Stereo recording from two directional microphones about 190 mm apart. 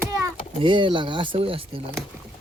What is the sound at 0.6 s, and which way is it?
Speech, 25° right (ahead or behind).